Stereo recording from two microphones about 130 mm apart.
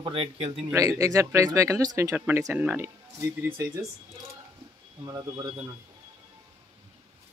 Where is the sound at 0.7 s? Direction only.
25° right (ahead or behind).